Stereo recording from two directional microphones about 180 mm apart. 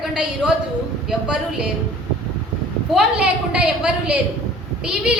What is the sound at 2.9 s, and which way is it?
A woman's voice, 5° right (ahead or behind).